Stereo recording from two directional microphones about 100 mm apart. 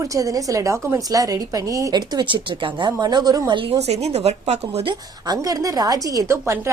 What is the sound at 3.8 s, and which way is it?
Speech, 90° right.